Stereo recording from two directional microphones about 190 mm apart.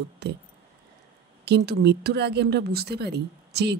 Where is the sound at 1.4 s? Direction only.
60° right (ahead or behind).